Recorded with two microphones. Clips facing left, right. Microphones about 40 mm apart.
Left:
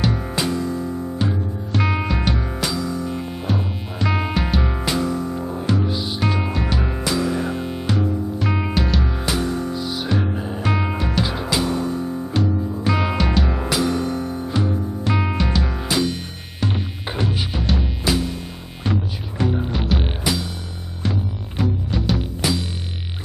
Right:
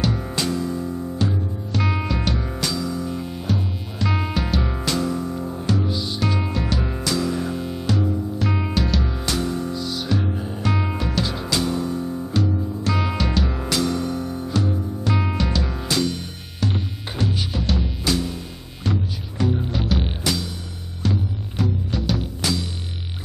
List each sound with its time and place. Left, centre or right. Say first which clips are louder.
0.0 s music: left 2 dB; centre